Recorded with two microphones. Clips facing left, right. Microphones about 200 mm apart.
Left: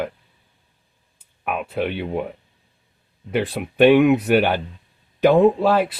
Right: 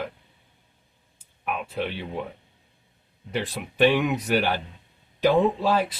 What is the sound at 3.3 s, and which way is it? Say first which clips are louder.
Speech: left 7 dB; 60° left (ahead or behind).